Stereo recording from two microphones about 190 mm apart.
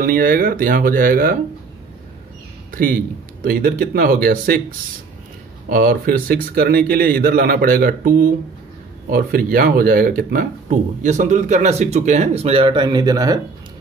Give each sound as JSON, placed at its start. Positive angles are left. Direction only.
{"t": 0.0, "sound": "a man's voice", "side_deg": -50}
{"t": 2.7, "sound": "a man's voice", "side_deg": -50}